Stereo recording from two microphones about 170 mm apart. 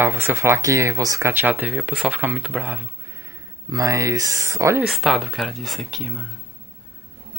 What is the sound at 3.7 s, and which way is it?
Speech, 20° right (ahead or behind).